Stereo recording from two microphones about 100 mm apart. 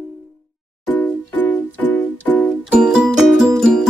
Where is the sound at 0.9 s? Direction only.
15° left (ahead or behind).